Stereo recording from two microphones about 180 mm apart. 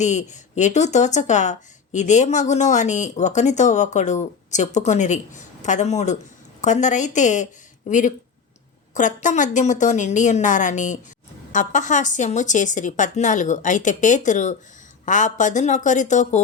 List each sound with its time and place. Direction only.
0.0 s a woman's voice: 40° left (ahead or behind)